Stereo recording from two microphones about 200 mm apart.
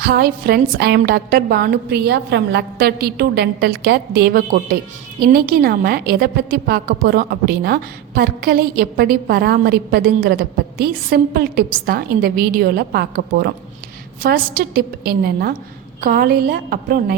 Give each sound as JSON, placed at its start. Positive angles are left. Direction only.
{"t": 0.0, "sound": "a woman's voice", "side_deg": -50}